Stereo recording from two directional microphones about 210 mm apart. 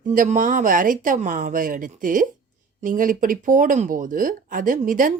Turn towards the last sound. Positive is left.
turn(degrees=-40)  # may be behind; listen again after turning